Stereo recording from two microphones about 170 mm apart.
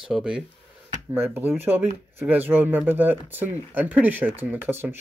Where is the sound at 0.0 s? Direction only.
5° right (ahead or behind).